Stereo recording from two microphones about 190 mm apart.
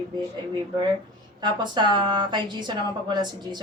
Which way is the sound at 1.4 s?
25° right (ahead or behind).